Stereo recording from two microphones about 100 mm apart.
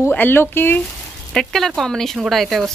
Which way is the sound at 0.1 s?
20° left (ahead or behind).